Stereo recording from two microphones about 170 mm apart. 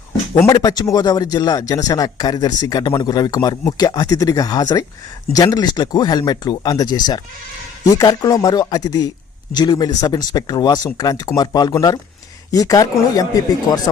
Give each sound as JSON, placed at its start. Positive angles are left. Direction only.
{"t": 0.4, "sound": "speech", "side_deg": 20}